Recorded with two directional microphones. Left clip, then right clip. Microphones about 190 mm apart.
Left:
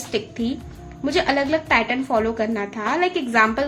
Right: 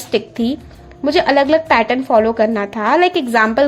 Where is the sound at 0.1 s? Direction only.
45° right (ahead or behind).